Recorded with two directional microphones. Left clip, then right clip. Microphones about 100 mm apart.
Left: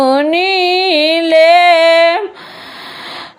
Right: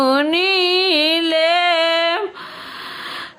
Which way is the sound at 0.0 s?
20° left (ahead or behind).